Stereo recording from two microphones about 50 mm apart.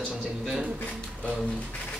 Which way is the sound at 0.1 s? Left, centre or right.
Centre.